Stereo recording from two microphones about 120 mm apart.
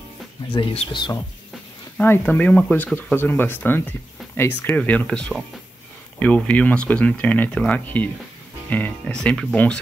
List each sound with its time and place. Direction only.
0.6 s speech: 40° left (ahead or behind)
2.0 s speech: 15° left (ahead or behind)